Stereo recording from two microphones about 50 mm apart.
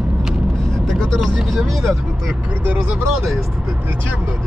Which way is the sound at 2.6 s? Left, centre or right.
Right.